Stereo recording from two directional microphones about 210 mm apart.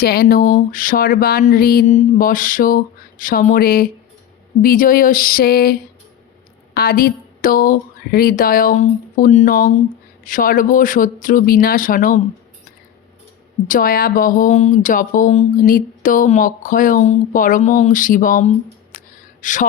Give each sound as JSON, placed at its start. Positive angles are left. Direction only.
{"t": 0.0, "sound": "speech", "side_deg": 45}
{"t": 6.7, "sound": "speech", "side_deg": 45}
{"t": 13.7, "sound": "speech", "side_deg": 40}
{"t": 18.9, "sound": "a sound", "side_deg": 35}